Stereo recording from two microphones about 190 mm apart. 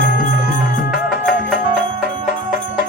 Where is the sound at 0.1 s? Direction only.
45° left (ahead or behind).